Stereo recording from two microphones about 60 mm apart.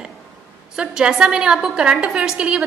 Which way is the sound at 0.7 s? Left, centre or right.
Centre.